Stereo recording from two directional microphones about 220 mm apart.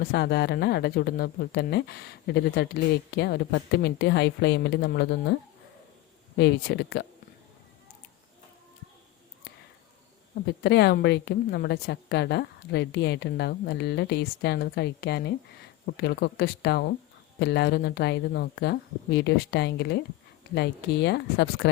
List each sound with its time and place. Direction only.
0.0 s a woman's voice: 45° left (ahead or behind)
10.4 s a woman's voice: 50° left (ahead or behind)